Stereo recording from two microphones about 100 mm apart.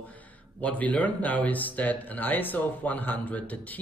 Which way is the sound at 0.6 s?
15° left (ahead or behind).